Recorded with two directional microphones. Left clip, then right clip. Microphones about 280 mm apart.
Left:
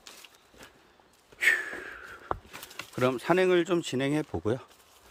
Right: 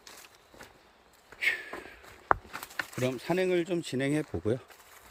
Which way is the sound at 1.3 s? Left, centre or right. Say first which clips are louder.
Left 5 dB; centre.